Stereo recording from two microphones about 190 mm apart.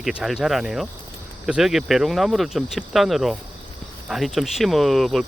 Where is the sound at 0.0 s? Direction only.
Centre (ahead or behind).